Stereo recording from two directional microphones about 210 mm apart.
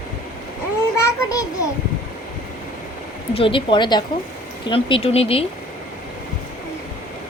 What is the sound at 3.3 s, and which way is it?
Speech, 25° left (ahead or behind).